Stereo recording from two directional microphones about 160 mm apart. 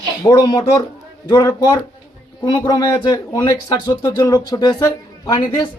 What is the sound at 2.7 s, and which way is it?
A man's voice, 25° left (ahead or behind).